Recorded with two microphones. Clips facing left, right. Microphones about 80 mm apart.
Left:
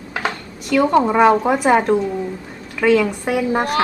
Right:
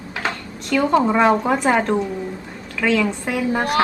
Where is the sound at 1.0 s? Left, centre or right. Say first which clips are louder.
Left 2 dB; centre.